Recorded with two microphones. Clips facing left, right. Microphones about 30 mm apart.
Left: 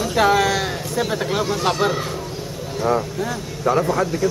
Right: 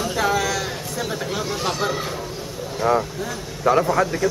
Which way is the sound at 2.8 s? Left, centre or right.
Centre.